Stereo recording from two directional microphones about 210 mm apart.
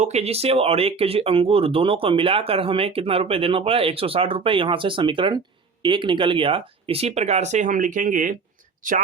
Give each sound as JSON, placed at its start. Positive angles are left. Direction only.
{"t": 0.0, "sound": "speech", "side_deg": -30}